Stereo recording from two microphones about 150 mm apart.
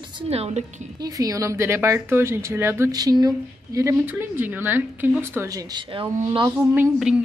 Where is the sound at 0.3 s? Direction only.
45° right (ahead or behind).